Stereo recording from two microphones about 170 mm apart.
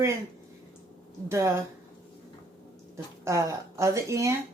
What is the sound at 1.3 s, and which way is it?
Speech, 15° right (ahead or behind).